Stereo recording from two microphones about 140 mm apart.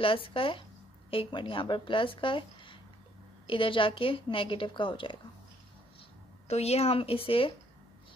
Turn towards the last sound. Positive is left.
turn(degrees=40)  # may be behind; listen again after turning